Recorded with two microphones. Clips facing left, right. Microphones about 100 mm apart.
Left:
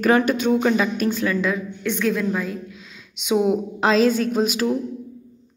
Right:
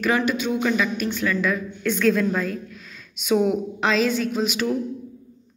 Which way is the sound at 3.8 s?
35° left (ahead or behind).